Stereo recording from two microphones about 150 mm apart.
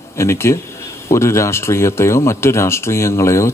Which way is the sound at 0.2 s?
20° left (ahead or behind).